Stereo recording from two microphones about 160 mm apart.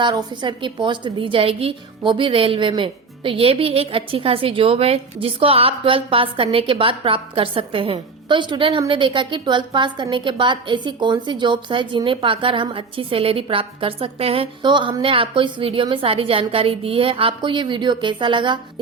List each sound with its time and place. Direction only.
0.0 s a woman's voice: 25° right (ahead or behind)